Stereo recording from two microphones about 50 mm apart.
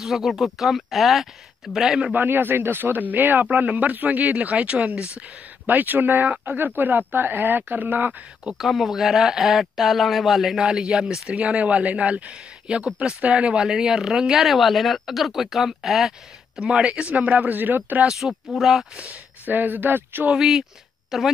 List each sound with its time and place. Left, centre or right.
0.0 s speech: centre
2.1 s a man's voice: right
5.7 s a man's voice: right
8.5 s speech: centre
11.2 s speech: right; by 16.1 s centre
16.5 s a man's voice: right
18.0 s speech: centre
19.0 s speech: right
20.3 s speech: centre